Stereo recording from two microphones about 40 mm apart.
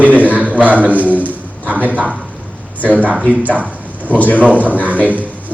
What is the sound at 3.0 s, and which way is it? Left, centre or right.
Speech, right.